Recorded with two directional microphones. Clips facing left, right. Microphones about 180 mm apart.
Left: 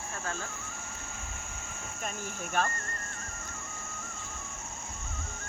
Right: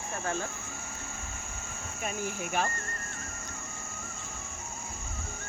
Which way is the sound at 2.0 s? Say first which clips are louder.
Right 5 dB; 10° right (ahead or behind).